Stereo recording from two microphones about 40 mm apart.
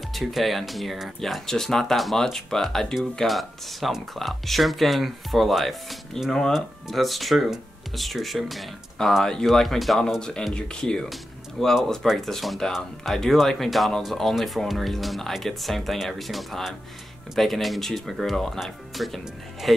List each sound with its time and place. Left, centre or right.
0.1 s speech: centre
1.2 s speech: centre
10.8 s speech: centre